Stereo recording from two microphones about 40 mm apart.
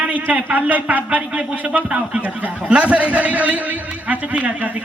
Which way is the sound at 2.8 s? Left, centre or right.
Right.